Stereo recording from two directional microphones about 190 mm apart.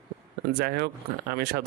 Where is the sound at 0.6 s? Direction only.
55° right (ahead or behind).